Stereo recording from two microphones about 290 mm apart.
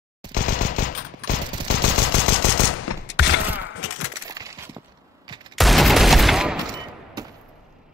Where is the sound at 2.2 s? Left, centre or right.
Left.